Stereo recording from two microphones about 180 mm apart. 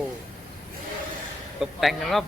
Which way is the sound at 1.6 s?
Centre (ahead or behind).